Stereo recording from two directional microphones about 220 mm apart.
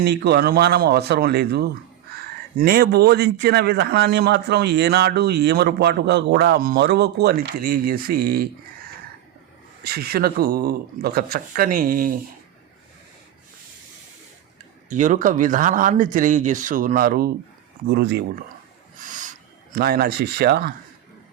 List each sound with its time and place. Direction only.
0.0 s a man's voice: 50° right (ahead or behind)
9.8 s a man's voice: 45° right (ahead or behind)
14.8 s a man's voice: 35° right (ahead or behind)
19.0 s a sound: 35° right (ahead or behind)